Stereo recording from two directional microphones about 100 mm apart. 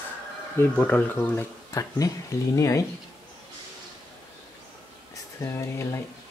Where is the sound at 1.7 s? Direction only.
35° left (ahead or behind).